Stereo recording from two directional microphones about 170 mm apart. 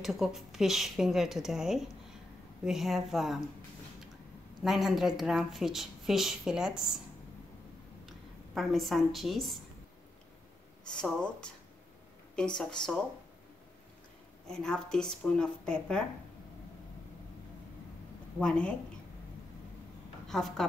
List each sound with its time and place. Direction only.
0.0 s speech: centre (ahead or behind)
4.6 s speech: centre (ahead or behind)
8.5 s speech: centre (ahead or behind)
10.9 s speech: 5° left (ahead or behind)
14.5 s speech: 5° left (ahead or behind)
18.4 s speech: 5° left (ahead or behind)
20.2 s a woman's voice: centre (ahead or behind)